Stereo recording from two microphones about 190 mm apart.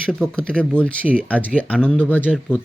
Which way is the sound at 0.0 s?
5° left (ahead or behind).